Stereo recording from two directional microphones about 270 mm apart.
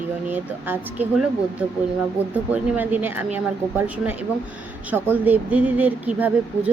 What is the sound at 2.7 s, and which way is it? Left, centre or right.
A woman's voice, centre.